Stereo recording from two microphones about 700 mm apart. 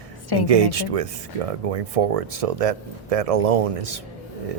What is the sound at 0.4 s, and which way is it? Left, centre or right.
Speech, right.